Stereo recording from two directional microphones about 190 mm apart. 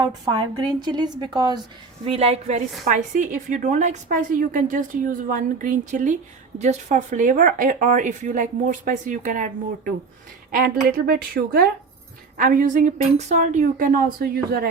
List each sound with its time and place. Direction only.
0.8 s a woman's voice: 20° right (ahead or behind)
2.0 s a woman's voice: 30° right (ahead or behind); by 14.7 s 55° right (ahead or behind)